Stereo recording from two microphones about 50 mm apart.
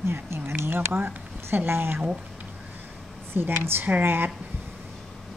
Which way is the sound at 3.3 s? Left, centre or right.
Right.